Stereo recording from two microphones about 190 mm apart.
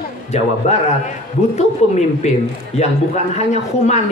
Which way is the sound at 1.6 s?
35° left (ahead or behind).